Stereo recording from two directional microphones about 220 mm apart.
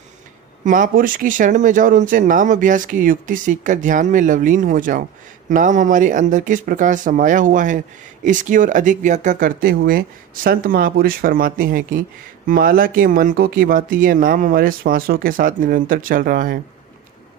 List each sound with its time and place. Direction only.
0.7 s speech: 40° right (ahead or behind)